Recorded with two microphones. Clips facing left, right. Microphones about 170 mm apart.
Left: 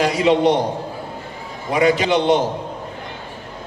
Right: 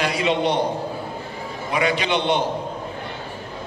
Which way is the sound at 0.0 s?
40° left (ahead or behind).